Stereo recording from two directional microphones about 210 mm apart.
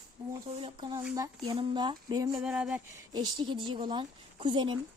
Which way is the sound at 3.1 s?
20° right (ahead or behind).